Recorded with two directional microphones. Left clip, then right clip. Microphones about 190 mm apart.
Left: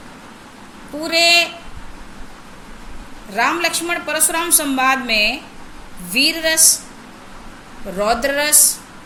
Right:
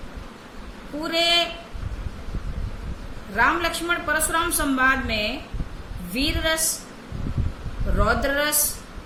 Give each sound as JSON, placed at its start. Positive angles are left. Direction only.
{"t": 1.0, "sound": "a woman's voice", "side_deg": -20}
{"t": 3.3, "sound": "a woman's voice", "side_deg": -15}
{"t": 7.9, "sound": "speech", "side_deg": -20}